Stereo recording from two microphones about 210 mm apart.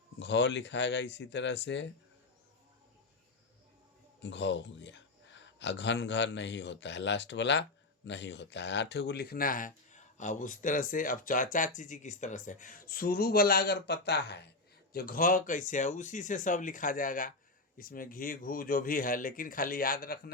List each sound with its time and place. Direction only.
0.2 s speech: 55° left (ahead or behind)
4.2 s speech: 55° left (ahead or behind)